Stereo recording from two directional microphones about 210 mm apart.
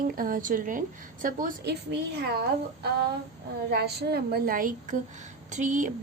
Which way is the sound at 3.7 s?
50° right (ahead or behind).